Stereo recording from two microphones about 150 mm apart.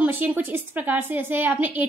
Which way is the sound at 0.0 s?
10° right (ahead or behind).